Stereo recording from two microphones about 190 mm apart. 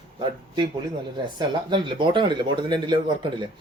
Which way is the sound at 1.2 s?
25° right (ahead or behind).